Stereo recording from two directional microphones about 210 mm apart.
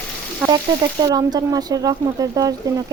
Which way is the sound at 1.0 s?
20° right (ahead or behind).